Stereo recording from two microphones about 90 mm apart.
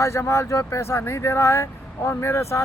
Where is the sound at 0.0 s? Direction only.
30° left (ahead or behind).